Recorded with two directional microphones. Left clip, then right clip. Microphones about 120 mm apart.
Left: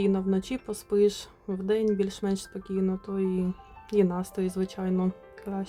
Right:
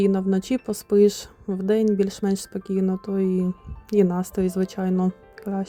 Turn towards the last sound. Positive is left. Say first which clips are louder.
# right 5 dB
turn(degrees=-35)  # may be behind; listen again after turning